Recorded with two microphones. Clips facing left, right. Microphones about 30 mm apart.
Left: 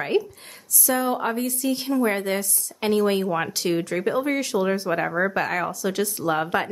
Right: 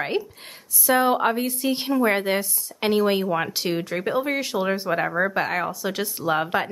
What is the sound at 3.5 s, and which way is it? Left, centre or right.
Speech, centre.